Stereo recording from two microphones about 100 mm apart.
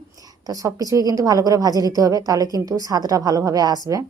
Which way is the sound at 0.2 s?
35° right (ahead or behind).